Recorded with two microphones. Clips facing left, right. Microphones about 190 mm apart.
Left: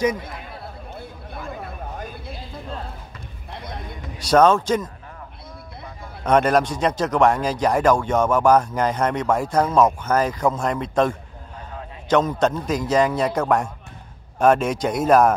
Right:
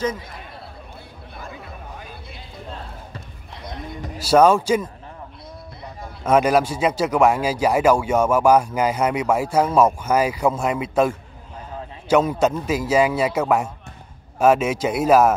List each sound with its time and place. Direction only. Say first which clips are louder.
1.3 s chatter: left 4 dB; 50° left (ahead or behind)
4.3 s speech: right 1 dB; 10° right (ahead or behind)
6.2 s speech: right 1 dB; 5° right (ahead or behind)